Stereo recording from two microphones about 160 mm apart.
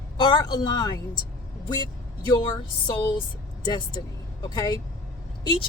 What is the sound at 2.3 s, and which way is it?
Speech, 30° left (ahead or behind).